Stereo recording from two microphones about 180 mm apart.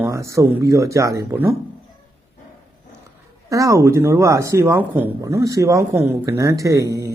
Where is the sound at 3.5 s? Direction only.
20° right (ahead or behind).